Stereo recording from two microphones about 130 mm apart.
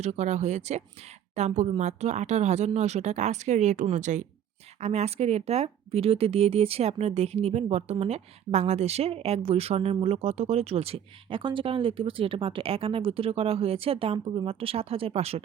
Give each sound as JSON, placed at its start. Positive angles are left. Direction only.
{"t": 0.0, "sound": "speech", "side_deg": -60}
{"t": 4.8, "sound": "speech", "side_deg": -55}